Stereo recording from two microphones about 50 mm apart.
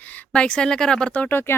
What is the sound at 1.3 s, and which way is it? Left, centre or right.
Speech, left.